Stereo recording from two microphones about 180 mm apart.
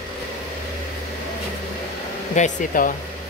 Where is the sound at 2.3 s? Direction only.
45° left (ahead or behind).